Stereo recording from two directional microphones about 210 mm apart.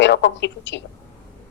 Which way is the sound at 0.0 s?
60° left (ahead or behind).